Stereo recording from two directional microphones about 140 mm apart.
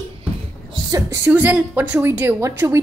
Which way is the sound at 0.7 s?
25° right (ahead or behind).